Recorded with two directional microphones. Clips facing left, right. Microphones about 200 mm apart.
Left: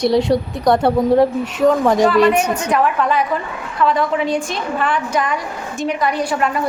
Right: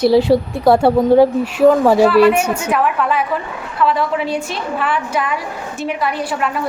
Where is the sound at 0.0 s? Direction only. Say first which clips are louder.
Right 3 dB; 5° right (ahead or behind).